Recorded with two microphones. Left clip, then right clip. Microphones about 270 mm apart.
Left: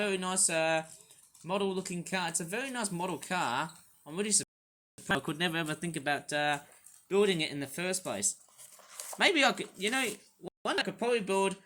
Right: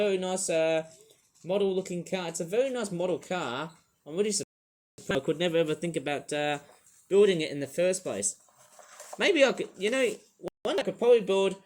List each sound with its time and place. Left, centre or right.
0.0 s speech: left